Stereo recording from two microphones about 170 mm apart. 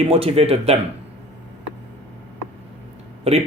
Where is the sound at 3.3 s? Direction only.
40° right (ahead or behind).